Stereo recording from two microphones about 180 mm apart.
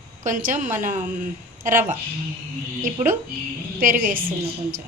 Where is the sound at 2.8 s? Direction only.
45° right (ahead or behind).